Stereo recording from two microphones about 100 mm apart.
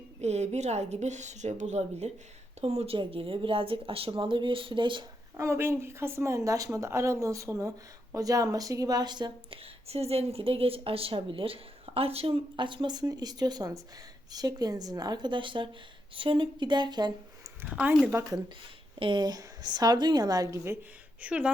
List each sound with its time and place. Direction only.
0.2 s a woman's voice: 90° right; by 5.0 s 55° right (ahead or behind)
5.4 s a woman's voice: 25° right (ahead or behind); by 9.3 s 45° right (ahead or behind)
9.5 s a woman's voice: 90° right; by 12.3 s 75° right (ahead or behind)
12.5 s a woman's voice: 55° right (ahead or behind)
17.7 s speech: 15° right (ahead or behind)
18.9 s speech: 60° right (ahead or behind)
19.2 s a woman's voice: 40° right (ahead or behind)
21.2 s speech: 10° right (ahead or behind)